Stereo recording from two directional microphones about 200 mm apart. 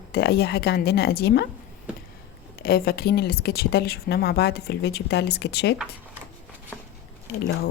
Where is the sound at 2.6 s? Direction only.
50° left (ahead or behind).